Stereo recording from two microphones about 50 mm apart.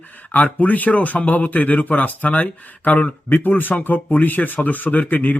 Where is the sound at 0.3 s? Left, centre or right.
Left.